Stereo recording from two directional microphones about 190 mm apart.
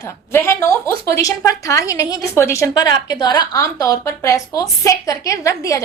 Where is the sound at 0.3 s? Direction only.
15° left (ahead or behind).